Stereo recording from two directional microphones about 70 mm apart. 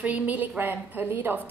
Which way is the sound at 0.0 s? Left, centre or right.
Right.